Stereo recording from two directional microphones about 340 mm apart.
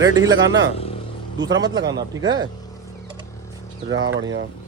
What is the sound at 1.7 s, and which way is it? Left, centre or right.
Speech, centre.